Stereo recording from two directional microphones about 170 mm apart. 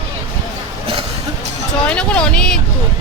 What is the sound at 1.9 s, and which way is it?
Speech, 5° left (ahead or behind).